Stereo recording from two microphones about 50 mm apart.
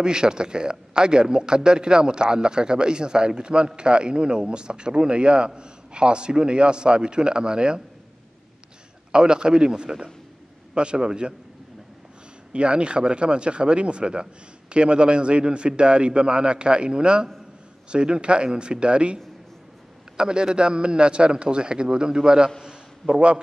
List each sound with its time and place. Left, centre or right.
0.0 s a man's voice: centre
9.1 s a man's voice: centre
12.5 s speech: right
20.2 s a man's voice: centre
22.6 s a sound: centre